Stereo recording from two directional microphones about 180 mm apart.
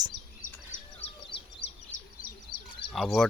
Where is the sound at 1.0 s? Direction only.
35° left (ahead or behind).